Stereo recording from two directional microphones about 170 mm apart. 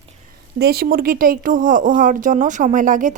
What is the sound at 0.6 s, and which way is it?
Speech, 65° right (ahead or behind).